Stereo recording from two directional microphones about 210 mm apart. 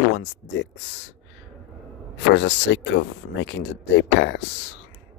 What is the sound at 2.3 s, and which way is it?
Speech, 55° left (ahead or behind).